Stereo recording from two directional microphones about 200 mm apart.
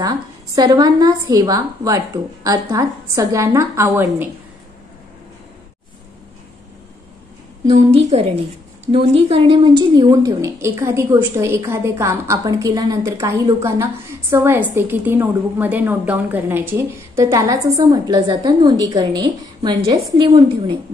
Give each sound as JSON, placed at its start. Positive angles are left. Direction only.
{"t": 0.0, "sound": "a woman's voice", "side_deg": -20}
{"t": 7.6, "sound": "a woman's voice", "side_deg": -35}